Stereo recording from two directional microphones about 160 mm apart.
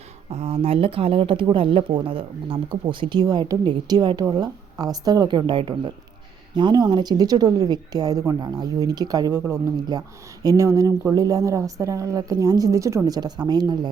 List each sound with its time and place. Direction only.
0.3 s speech: 40° right (ahead or behind)